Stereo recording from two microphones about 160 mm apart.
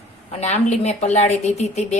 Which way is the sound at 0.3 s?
45° left (ahead or behind).